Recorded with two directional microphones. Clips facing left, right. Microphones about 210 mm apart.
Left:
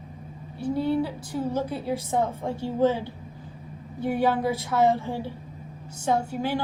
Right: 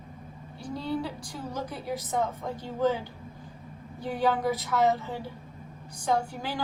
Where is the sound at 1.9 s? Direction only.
30° left (ahead or behind).